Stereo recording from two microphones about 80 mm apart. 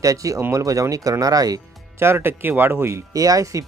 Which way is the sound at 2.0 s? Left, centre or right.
Right.